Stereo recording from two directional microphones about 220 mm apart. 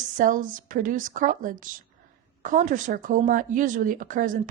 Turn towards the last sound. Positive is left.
turn(degrees=-35)  # may be behind; listen again after turning